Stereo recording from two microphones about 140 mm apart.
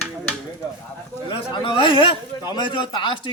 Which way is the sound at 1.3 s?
35° left (ahead or behind).